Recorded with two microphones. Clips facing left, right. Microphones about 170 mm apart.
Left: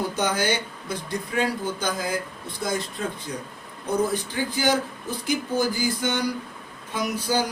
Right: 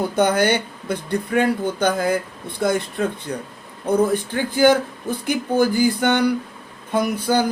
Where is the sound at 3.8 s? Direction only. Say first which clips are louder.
Right 6 dB; 55° right (ahead or behind).